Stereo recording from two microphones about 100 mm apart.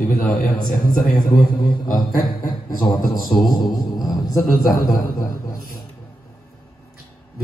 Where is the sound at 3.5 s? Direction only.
45° left (ahead or behind).